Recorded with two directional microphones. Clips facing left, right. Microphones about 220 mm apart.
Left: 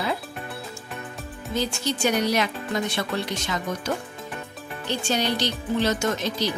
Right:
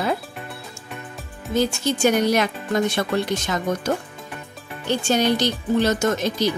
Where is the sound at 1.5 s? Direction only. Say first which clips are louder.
Right 5 dB; 50° right (ahead or behind).